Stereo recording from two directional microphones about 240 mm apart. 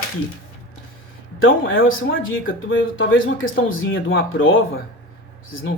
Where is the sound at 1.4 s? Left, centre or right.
Left.